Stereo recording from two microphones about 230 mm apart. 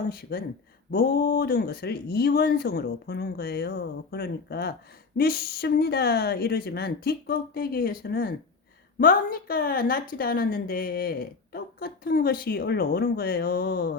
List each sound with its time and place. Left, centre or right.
0.1 s a woman's voice: left